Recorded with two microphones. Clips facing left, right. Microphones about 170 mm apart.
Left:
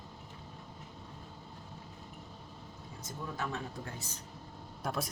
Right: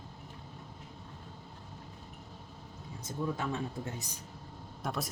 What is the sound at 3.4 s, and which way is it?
Speech, 20° right (ahead or behind).